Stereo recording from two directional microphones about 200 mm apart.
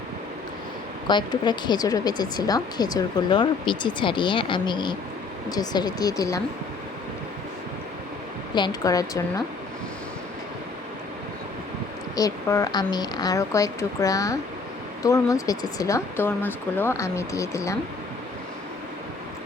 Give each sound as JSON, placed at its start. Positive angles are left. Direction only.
{"t": 1.0, "sound": "speech", "side_deg": 20}
{"t": 8.5, "sound": "speech", "side_deg": 20}
{"t": 12.1, "sound": "speech", "side_deg": 15}